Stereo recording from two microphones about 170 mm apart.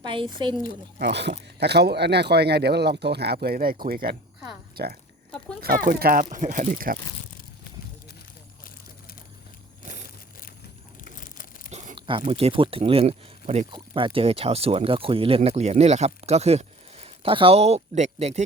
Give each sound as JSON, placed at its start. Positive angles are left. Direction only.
{"t": 0.0, "sound": "speech", "side_deg": -30}
{"t": 0.9, "sound": "speech", "side_deg": -85}
{"t": 11.0, "sound": "a sound", "side_deg": 50}
{"t": 11.9, "sound": "a sound", "side_deg": -30}
{"t": 12.3, "sound": "speech", "side_deg": -35}
{"t": 13.7, "sound": "speech", "side_deg": -30}